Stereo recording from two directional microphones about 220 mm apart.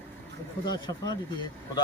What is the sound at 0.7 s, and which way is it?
Speech, 20° left (ahead or behind).